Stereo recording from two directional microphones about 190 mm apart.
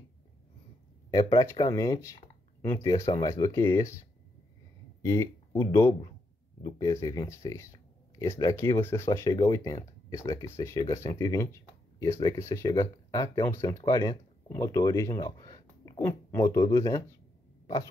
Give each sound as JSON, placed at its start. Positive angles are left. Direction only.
{"t": 1.1, "sound": "speech", "side_deg": 15}
{"t": 5.0, "sound": "speech", "side_deg": 15}